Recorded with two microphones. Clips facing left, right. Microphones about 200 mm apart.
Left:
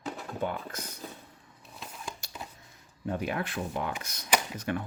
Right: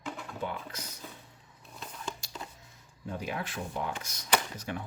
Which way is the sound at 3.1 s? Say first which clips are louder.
Left 4 dB; 60° left (ahead or behind).